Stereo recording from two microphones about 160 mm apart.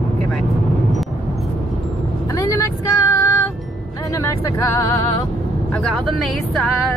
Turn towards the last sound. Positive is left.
turn(degrees=20)  # may be behind; listen again after turning